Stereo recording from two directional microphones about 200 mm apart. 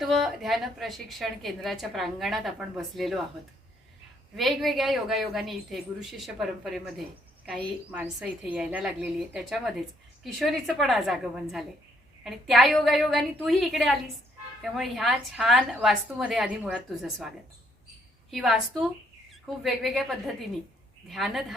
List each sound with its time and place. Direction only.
0.0 s a woman's voice: centre (ahead or behind)
4.4 s a woman's voice: centre (ahead or behind)
7.9 s a woman's voice: 5° right (ahead or behind)
18.3 s a woman's voice: centre (ahead or behind)